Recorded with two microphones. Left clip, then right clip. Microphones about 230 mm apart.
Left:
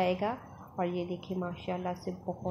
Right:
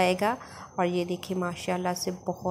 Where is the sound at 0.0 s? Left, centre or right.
Right.